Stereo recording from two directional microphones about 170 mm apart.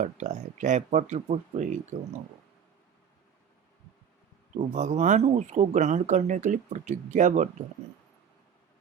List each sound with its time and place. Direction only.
0.0 s speech: 45° right (ahead or behind)
4.5 s speech: 45° right (ahead or behind)